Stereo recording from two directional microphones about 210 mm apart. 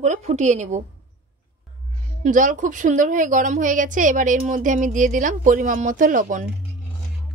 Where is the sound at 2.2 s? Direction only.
40° right (ahead or behind).